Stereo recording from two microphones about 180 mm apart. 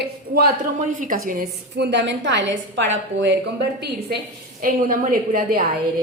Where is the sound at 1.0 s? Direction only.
50° right (ahead or behind); by 3.4 s 90° right.